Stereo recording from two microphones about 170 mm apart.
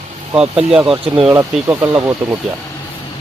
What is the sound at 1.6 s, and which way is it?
Speech, 15° right (ahead or behind).